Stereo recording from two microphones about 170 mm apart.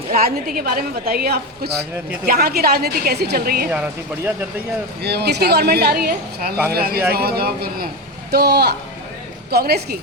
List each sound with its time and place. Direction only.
0.1 s a woman's voice: 60° right (ahead or behind)
5.0 s a woman's voice: 75° right (ahead or behind)